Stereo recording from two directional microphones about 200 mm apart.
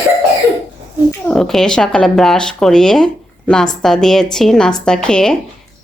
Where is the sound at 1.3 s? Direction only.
Centre (ahead or behind).